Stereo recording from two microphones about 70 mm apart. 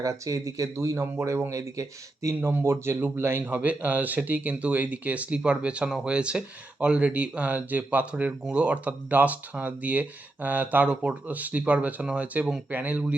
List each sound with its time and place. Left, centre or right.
0.0 s speech: right
2.5 s speech: right
3.4 s speech: right